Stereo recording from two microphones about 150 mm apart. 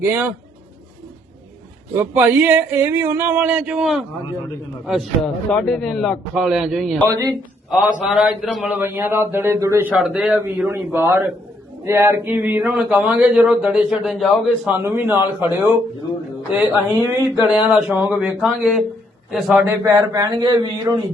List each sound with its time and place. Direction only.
0.0 s speech: 15° right (ahead or behind)
2.0 s a man's voice: 15° right (ahead or behind)
7.1 s speech: 20° right (ahead or behind)
7.7 s speech: centre (ahead or behind)
10.0 s a man's voice: centre (ahead or behind)
10.7 s speech: 15° right (ahead or behind); by 14.7 s centre (ahead or behind)
14.7 s speech: 15° right (ahead or behind)
17.1 s speech: 20° right (ahead or behind)
17.5 s speech: 5° right (ahead or behind)
18.4 s a man's voice: centre (ahead or behind)
19.9 s speech: 20° right (ahead or behind)